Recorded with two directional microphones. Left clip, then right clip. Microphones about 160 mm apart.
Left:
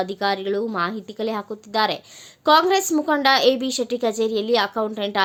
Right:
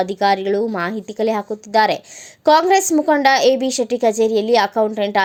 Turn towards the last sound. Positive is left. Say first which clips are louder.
# right 7 dB
turn(degrees=-15)  # may be behind; listen again after turning